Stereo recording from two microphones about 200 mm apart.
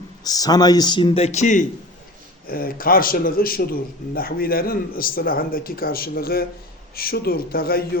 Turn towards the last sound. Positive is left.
turn(degrees=50)  # may be behind; listen again after turning